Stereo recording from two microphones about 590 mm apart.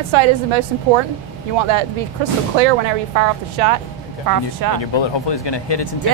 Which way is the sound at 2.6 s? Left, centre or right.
Right.